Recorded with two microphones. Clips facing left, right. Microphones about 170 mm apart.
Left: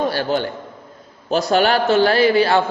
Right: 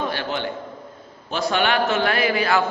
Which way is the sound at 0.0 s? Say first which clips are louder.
Left 6 dB; 40° left (ahead or behind).